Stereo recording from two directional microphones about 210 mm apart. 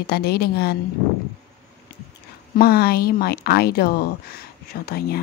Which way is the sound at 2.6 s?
50° left (ahead or behind).